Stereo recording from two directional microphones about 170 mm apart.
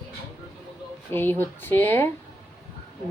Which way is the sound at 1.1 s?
15° left (ahead or behind).